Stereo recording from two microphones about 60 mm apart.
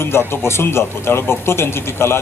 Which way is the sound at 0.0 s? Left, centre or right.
Left.